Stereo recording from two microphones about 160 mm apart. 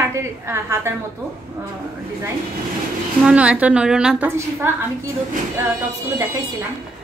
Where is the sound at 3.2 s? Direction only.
5° right (ahead or behind).